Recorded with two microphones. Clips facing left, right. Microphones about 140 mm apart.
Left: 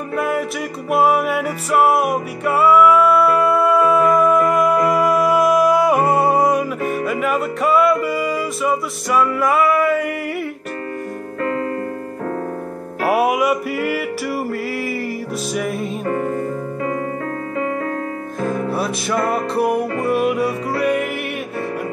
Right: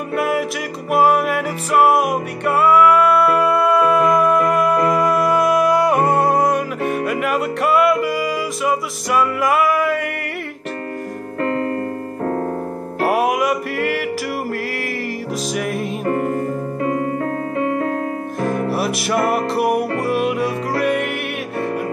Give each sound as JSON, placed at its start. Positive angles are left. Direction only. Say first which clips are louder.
{"t": 0.1, "sound": "music", "louder": "right 1 dB", "side_deg": -5}
{"t": 13.1, "sound": "music", "louder": "left 2 dB", "side_deg": 0}
{"t": 15.5, "sound": "music", "louder": "left 1 dB", "side_deg": 0}
{"t": 18.4, "sound": "music", "louder": "right 1 dB", "side_deg": -65}
{"t": 19.0, "sound": "music", "louder": "right 2 dB", "side_deg": -10}